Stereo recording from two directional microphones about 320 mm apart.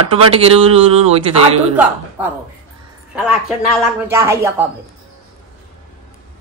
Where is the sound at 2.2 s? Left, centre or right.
Centre.